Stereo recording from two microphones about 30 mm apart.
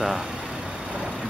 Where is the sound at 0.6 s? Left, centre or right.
Right.